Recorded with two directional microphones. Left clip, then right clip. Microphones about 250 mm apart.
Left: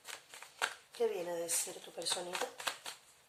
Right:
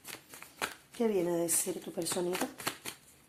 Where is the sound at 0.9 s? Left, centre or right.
Right.